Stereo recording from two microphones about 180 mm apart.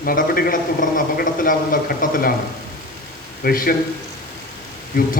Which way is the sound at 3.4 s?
55° left (ahead or behind).